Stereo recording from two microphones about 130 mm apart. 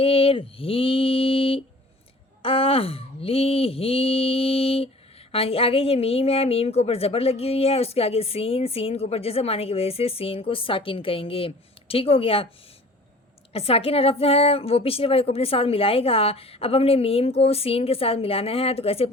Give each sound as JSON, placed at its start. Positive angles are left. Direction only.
{"t": 0.0, "sound": "a woman's voice", "side_deg": 45}
{"t": 13.5, "sound": "a woman's voice", "side_deg": 50}